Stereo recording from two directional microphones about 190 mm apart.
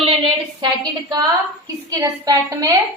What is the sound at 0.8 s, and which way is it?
A woman's voice, 20° right (ahead or behind).